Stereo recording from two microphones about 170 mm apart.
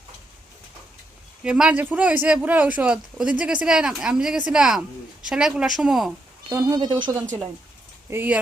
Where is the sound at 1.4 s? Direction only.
5° right (ahead or behind).